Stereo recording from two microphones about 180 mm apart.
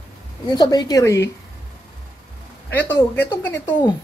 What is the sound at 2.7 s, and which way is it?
Speech, 10° left (ahead or behind).